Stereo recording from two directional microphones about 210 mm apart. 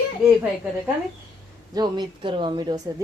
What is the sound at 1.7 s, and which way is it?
A woman's voice, 20° right (ahead or behind).